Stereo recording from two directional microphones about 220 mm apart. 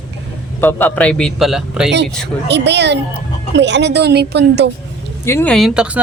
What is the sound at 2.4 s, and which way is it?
A woman's voice, 50° right (ahead or behind).